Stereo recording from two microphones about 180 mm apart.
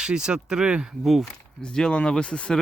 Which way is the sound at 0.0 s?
5° right (ahead or behind).